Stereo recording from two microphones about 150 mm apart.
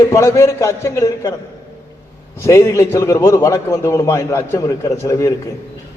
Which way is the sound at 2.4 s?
20° left (ahead or behind).